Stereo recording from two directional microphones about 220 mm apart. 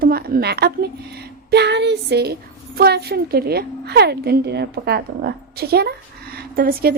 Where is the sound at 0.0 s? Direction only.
45° right (ahead or behind).